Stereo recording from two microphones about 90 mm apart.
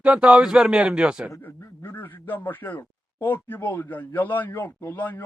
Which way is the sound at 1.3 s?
30° left (ahead or behind).